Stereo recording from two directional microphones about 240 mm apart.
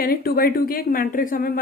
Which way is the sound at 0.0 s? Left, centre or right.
Left.